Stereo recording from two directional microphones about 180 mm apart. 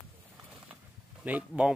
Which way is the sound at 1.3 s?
10° right (ahead or behind).